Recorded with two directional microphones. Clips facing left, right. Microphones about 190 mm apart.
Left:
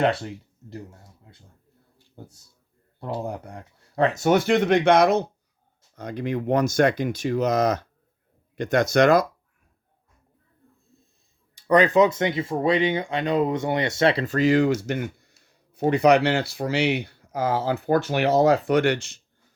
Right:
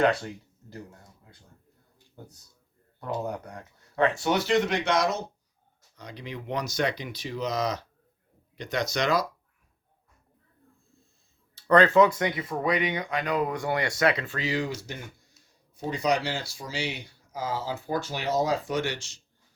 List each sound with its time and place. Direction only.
0.0 s speech: 30° left (ahead or behind); by 9.2 s 50° left (ahead or behind)
11.5 s speech: 15° left (ahead or behind); by 14.3 s 30° left (ahead or behind)
14.3 s speech: 50° left (ahead or behind)